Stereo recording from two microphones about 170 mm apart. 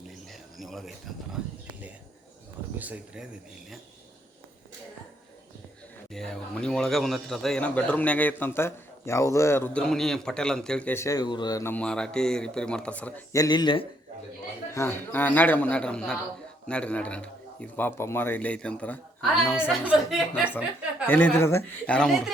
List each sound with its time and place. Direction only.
0.3 s speech: centre (ahead or behind)
2.7 s speech: 10° right (ahead or behind)
6.1 s a man's voice: centre (ahead or behind)
13.3 s speech: 20° left (ahead or behind)
14.7 s a man's voice: 15° left (ahead or behind)
19.6 s speech: 5° right (ahead or behind)
21.1 s a man's voice: 10° left (ahead or behind)